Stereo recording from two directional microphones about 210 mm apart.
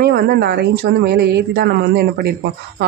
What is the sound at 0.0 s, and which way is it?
Speech, 50° right (ahead or behind).